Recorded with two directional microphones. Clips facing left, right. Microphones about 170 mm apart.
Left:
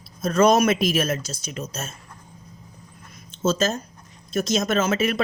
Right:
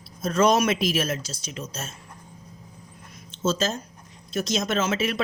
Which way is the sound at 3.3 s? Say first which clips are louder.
Left 3 dB; 45° left (ahead or behind).